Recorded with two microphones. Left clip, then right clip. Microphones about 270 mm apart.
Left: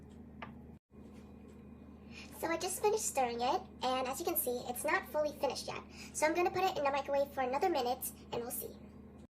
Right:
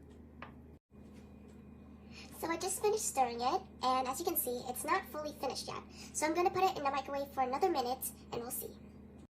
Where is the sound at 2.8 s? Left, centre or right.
Centre.